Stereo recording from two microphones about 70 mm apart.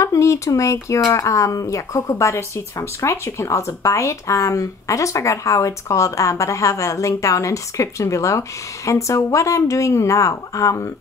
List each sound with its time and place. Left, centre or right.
0.0 s speech: left